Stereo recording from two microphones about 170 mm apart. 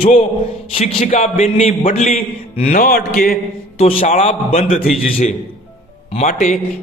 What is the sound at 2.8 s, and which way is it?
Speech, 60° left (ahead or behind).